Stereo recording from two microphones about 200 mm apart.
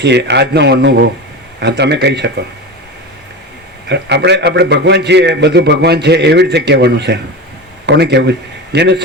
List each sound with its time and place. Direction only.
0.0 s a man's voice: 60° right (ahead or behind)
3.8 s a man's voice: 60° right (ahead or behind)